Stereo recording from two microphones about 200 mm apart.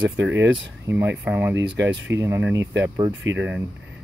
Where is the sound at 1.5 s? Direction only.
60° right (ahead or behind).